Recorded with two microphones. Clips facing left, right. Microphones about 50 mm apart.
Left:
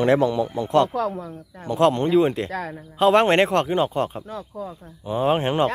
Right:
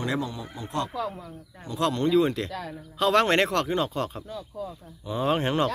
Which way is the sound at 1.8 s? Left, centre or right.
Left.